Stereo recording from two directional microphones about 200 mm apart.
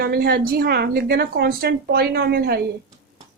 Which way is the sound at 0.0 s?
50° right (ahead or behind).